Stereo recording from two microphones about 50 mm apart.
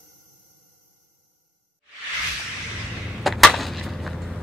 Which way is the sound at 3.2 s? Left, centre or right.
Centre.